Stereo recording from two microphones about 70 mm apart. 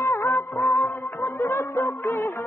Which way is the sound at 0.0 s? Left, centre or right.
Left.